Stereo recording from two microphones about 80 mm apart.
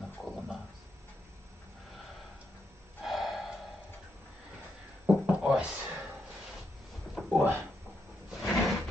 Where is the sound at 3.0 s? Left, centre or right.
Centre.